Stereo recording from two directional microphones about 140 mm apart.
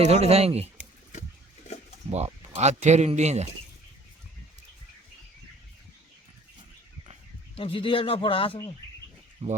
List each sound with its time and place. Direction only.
0.0 s speech: 50° right (ahead or behind)
2.0 s speech: 50° right (ahead or behind)
7.5 s a man's voice: 40° left (ahead or behind)
9.4 s speech: 45° right (ahead or behind)